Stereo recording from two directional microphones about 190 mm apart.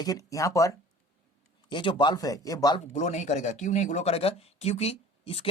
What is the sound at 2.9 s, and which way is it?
Speech, 40° left (ahead or behind).